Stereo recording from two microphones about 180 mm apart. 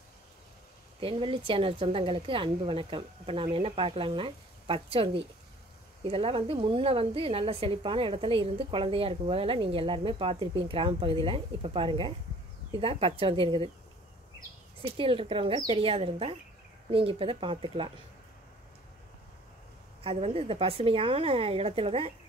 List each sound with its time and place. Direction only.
1.0 s a woman's voice: 30° right (ahead or behind)
14.8 s a woman's voice: 30° right (ahead or behind)
20.0 s a woman's voice: 30° right (ahead or behind)